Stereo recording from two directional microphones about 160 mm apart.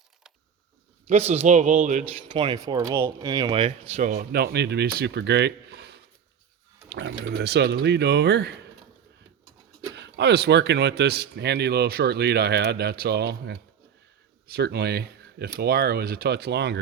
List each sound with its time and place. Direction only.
1.0 s speech: 45° right (ahead or behind)
2.3 s speech: 30° right (ahead or behind)
4.0 s speech: 50° right (ahead or behind)
4.3 s speech: 85° right
9.9 s speech: 90° right